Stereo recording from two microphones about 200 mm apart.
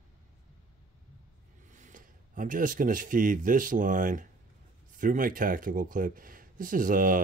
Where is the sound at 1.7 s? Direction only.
40° right (ahead or behind).